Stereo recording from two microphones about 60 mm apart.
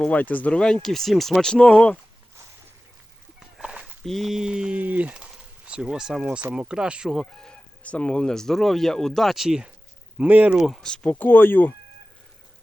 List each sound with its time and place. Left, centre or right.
0.1 s speech: left
0.5 s speech: centre
3.6 s horse: centre
4.0 s a sound: centre
4.3 s speech: centre
7.1 s speech: centre
7.5 s speech: left; by 9.7 s centre
10.2 s speech: right
10.6 s speech: centre
10.8 s speech: centre
11.1 s speech: left